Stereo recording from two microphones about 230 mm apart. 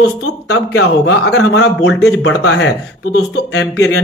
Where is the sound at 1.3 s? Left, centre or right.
Left.